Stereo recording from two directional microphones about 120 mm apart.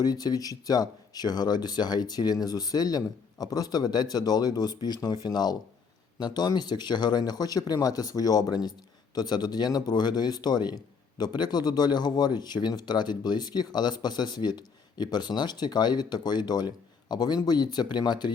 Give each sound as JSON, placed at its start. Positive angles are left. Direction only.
{"t": 0.0, "sound": "a man's voice", "side_deg": 35}